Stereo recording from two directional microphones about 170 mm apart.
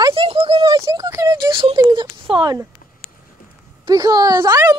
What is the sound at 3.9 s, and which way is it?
Speech, 20° right (ahead or behind).